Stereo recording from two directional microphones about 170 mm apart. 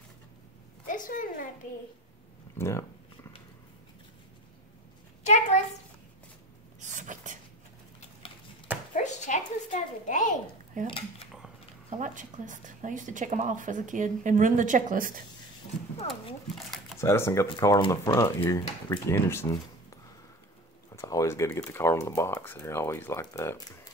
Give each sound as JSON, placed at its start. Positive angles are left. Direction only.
{"t": 0.8, "sound": "a woman's voice", "side_deg": 50}
{"t": 2.5, "sound": "speech", "side_deg": 15}
{"t": 5.2, "sound": "a woman's voice", "side_deg": 40}
{"t": 6.8, "sound": "a sound", "side_deg": -45}
{"t": 8.9, "sound": "a sound", "side_deg": 45}
{"t": 10.8, "sound": "a woman's voice", "side_deg": -50}
{"t": 12.0, "sound": "a woman's voice", "side_deg": -50}
{"t": 17.0, "sound": "speech", "side_deg": 15}
{"t": 20.9, "sound": "speech", "side_deg": 20}